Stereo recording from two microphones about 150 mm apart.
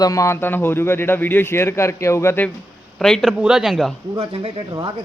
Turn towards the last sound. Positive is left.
turn(degrees=-30)  # may be behind; listen again after turning